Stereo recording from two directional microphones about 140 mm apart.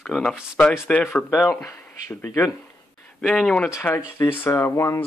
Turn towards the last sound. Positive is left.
turn(degrees=20)  # may be behind; listen again after turning